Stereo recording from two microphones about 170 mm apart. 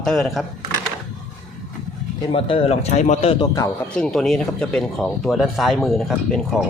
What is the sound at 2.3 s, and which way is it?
Speech, 35° left (ahead or behind).